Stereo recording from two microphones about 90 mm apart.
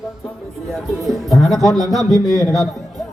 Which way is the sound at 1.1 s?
Centre (ahead or behind).